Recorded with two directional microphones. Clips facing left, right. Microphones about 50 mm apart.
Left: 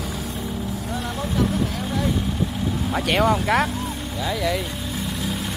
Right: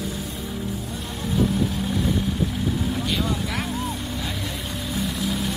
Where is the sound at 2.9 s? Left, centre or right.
Left.